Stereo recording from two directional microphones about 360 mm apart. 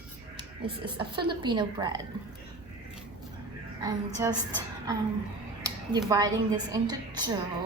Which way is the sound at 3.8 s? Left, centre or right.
Centre.